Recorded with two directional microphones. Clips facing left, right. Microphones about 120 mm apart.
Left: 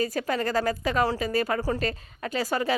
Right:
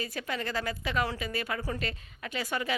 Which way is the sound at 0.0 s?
40° left (ahead or behind).